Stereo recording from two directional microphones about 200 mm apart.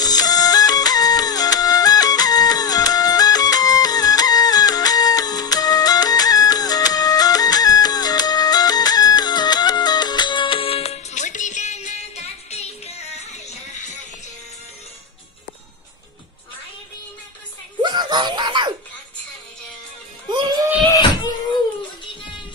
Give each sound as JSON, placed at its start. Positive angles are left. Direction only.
{"t": 0.0, "sound": "music", "side_deg": 20}
{"t": 17.8, "sound": "music", "side_deg": -20}
{"t": 20.2, "sound": "a sound", "side_deg": -20}